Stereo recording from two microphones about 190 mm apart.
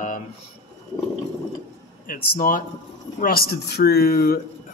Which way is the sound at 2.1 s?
45° left (ahead or behind).